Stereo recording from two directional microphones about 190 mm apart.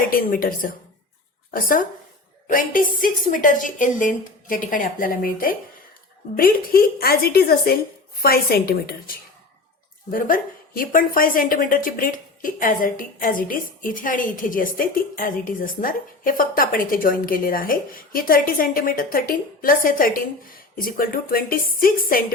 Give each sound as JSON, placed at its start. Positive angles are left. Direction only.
{"t": 0.1, "sound": "a woman's voice", "side_deg": 50}